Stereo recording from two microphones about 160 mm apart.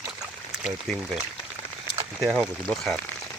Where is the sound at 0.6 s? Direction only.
5° right (ahead or behind).